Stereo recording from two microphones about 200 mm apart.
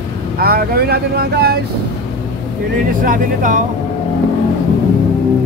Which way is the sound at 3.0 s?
40° right (ahead or behind).